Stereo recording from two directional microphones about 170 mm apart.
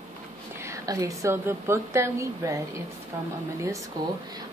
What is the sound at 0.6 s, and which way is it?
A woman's voice, 20° right (ahead or behind).